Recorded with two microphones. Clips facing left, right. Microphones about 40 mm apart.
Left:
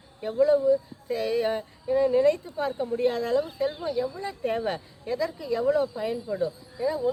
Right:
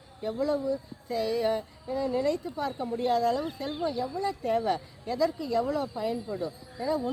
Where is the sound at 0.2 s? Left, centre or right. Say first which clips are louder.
Left 7 dB; left.